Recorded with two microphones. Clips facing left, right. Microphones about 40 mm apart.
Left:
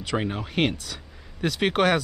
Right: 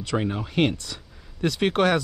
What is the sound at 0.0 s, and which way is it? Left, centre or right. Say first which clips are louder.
Speech: right 1 dB; centre.